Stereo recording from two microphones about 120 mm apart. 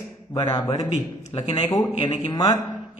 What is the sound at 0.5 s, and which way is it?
A man's voice, 30° left (ahead or behind).